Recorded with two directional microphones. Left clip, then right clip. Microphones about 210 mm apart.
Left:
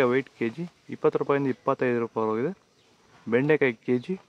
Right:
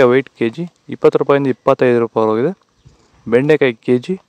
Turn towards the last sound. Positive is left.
turn(degrees=-40)  # may be behind; listen again after turning